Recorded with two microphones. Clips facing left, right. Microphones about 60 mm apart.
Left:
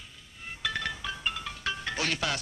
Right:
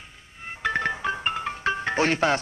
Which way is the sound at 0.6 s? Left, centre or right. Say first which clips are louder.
Right 8 dB; right.